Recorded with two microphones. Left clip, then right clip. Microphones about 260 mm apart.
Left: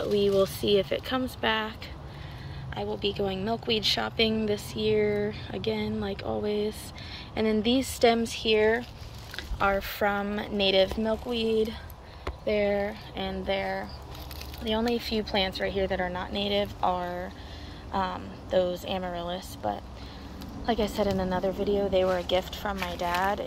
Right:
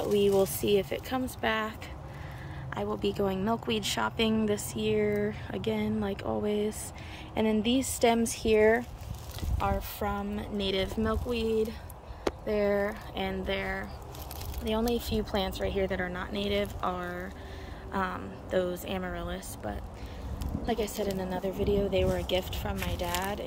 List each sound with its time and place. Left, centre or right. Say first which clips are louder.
0.1 s a woman's voice: left 1 dB; centre
8.3 s a woman's voice: even; centre
9.6 s a woman's voice: left 6 dB; centre